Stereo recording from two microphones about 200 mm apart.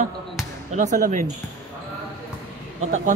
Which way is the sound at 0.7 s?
40° right (ahead or behind).